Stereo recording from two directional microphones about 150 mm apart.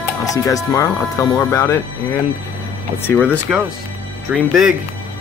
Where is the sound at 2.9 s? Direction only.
15° left (ahead or behind).